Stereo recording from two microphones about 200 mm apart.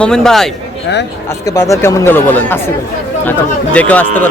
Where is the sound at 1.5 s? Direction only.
15° left (ahead or behind).